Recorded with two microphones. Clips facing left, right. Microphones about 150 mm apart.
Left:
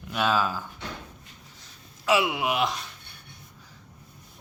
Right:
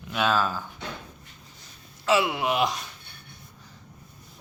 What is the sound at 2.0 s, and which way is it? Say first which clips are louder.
Speech: right 1 dB; 10° left (ahead or behind).